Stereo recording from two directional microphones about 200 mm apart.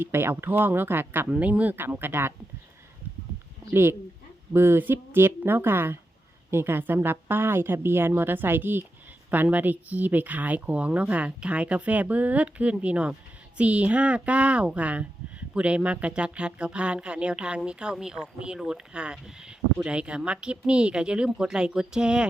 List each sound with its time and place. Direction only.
0.0 s speech: 10° right (ahead or behind)
3.7 s speech: 10° right (ahead or behind)